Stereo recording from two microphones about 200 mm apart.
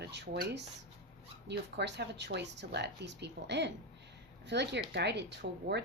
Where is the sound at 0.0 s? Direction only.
55° right (ahead or behind).